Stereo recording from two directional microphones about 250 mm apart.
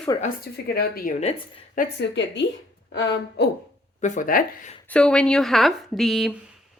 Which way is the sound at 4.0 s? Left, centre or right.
Left.